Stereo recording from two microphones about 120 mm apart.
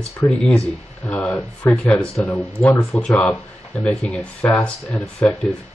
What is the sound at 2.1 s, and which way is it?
Speech, 20° left (ahead or behind).